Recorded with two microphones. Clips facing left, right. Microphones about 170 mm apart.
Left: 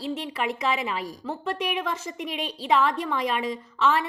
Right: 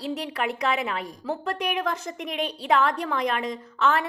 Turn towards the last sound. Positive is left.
turn(degrees=0)  # may be behind; listen again after turning